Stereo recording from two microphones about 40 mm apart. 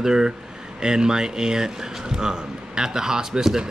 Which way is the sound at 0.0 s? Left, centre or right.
Centre.